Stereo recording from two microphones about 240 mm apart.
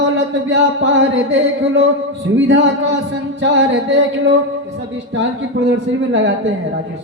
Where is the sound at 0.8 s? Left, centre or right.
Right.